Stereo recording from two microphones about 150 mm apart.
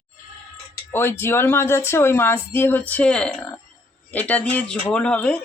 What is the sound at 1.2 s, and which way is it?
Speech, 15° left (ahead or behind).